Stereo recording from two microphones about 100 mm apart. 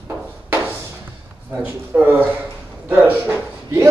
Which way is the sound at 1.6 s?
15° right (ahead or behind).